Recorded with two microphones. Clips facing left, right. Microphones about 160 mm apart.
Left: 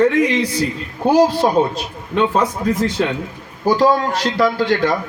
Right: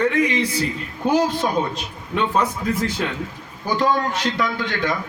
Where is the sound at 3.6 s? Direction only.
35° left (ahead or behind).